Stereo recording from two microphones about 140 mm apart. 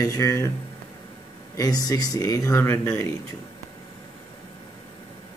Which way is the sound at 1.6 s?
25° left (ahead or behind).